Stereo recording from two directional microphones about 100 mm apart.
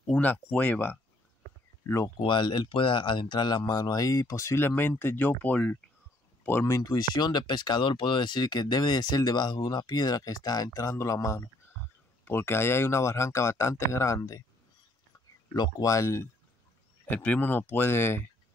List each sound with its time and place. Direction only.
0.0 s speech: 10° left (ahead or behind)
2.0 s speech: 50° left (ahead or behind); by 5.8 s 15° left (ahead or behind)
6.4 s speech: 25° left (ahead or behind)
15.5 s speech: 40° left (ahead or behind)
17.0 s speech: 15° left (ahead or behind)